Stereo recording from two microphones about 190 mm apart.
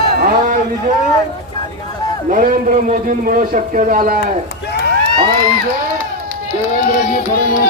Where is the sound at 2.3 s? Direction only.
45° right (ahead or behind).